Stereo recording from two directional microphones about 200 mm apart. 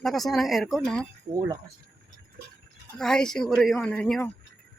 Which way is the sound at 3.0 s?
5° left (ahead or behind).